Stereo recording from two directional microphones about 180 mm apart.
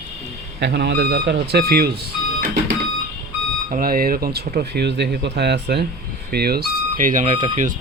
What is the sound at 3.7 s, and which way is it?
Speech, 55° right (ahead or behind).